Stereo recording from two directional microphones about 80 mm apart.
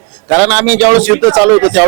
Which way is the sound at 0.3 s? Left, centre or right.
Right.